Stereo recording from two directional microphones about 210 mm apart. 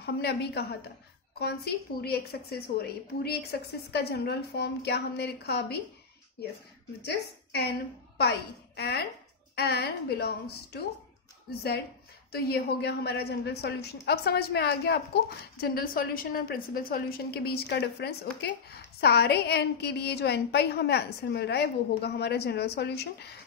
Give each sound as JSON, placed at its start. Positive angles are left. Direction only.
{"t": 0.0, "sound": "a woman's voice", "side_deg": 50}
{"t": 7.0, "sound": "a woman's voice", "side_deg": 50}
{"t": 12.3, "sound": "a woman's voice", "side_deg": 50}